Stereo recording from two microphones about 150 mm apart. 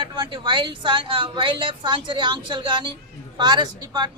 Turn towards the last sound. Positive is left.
turn(degrees=-30)  # may be behind; listen again after turning